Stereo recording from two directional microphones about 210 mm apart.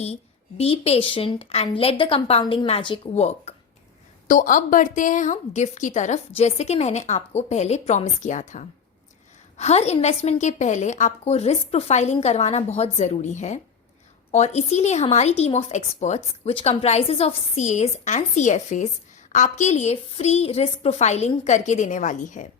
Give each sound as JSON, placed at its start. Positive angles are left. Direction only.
{"t": 0.0, "sound": "a woman's voice", "side_deg": 30}